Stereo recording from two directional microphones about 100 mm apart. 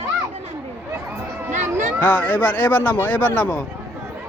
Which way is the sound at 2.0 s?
15° left (ahead or behind).